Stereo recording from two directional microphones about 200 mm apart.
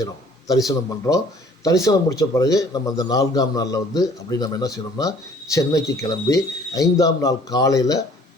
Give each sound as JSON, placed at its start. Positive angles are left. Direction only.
{"t": 0.0, "sound": "a man's voice", "side_deg": 15}